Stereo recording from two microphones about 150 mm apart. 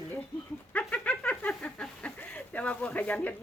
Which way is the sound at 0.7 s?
10° left (ahead or behind).